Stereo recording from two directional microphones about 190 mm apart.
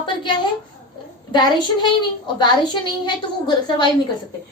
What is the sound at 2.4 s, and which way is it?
Speech, 25° left (ahead or behind).